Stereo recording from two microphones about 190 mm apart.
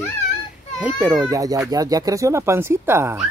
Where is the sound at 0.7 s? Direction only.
5° right (ahead or behind).